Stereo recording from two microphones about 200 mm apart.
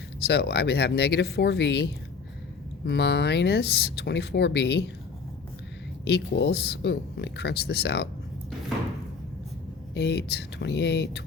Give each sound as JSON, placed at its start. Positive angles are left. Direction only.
{"t": 0.3, "sound": "speech", "side_deg": 55}
{"t": 6.1, "sound": "speech", "side_deg": 55}
{"t": 9.9, "sound": "speech", "side_deg": 60}